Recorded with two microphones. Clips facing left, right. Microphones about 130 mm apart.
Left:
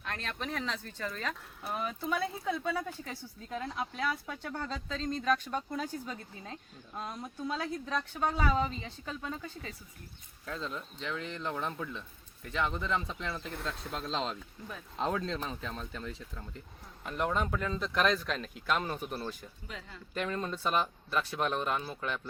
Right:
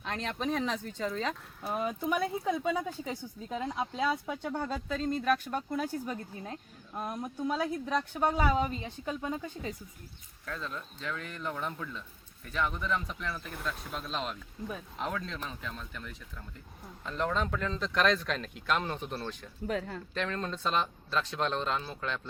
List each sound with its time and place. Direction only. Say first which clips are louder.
0.0 s speech: right 5 dB; 20° right (ahead or behind)
10.4 s speech: left 1 dB; 25° left (ahead or behind)
17.0 s speech: even; 15° left (ahead or behind)
19.6 s speech: right 14 dB; 55° right (ahead or behind)
20.1 s speech: left 1 dB; 10° left (ahead or behind)